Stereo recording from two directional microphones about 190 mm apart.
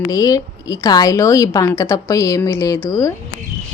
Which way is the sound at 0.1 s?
20° left (ahead or behind).